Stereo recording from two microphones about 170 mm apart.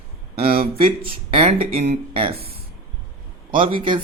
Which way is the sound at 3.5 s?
30° right (ahead or behind).